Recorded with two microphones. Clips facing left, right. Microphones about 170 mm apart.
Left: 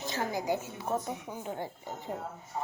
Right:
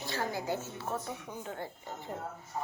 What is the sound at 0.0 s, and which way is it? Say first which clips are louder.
A woman's voice: left 2 dB; 15° left (ahead or behind).